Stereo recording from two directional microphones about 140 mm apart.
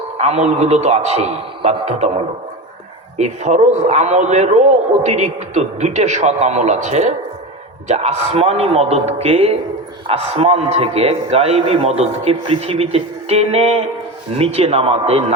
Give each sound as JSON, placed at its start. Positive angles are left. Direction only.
{"t": 0.2, "sound": "a man's voice", "side_deg": -50}
{"t": 3.2, "sound": "a man's voice", "side_deg": -55}